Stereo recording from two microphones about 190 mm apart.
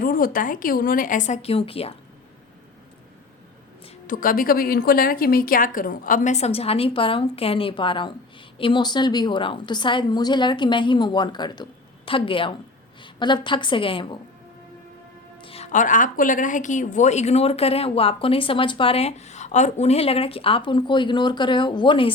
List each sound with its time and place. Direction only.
0.0 s a woman's voice: 50° left (ahead or behind); by 2.0 s 30° left (ahead or behind)
4.0 s a woman's voice: 45° left (ahead or behind); by 14.2 s 25° left (ahead or behind)
15.4 s a woman's voice: 30° left (ahead or behind)